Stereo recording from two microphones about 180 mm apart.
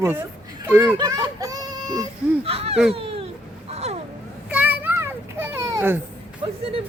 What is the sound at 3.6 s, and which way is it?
Vehicle, 35° right (ahead or behind).